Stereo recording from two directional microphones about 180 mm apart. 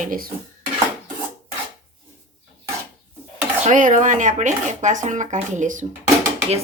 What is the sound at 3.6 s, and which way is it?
Speech, 45° right (ahead or behind).